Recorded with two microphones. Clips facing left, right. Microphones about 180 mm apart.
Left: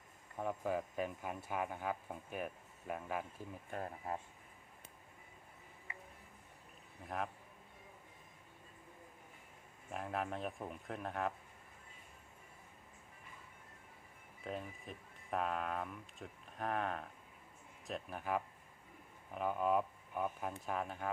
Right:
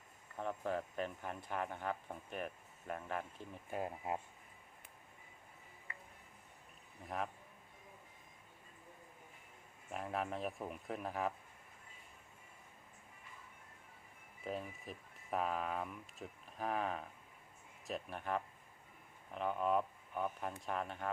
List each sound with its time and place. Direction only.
0.3 s speech: 10° left (ahead or behind)
3.7 s speech: 15° right (ahead or behind)
7.0 s speech: centre (ahead or behind)
9.9 s speech: centre (ahead or behind)
14.4 s speech: centre (ahead or behind)